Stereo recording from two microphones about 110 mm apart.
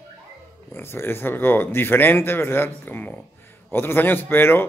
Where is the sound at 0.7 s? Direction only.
20° left (ahead or behind).